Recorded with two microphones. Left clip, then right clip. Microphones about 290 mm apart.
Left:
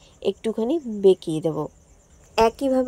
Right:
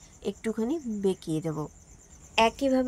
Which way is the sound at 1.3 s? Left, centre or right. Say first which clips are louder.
Left 4 dB; left.